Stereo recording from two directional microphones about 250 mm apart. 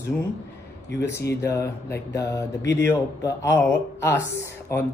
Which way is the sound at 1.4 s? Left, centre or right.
Centre.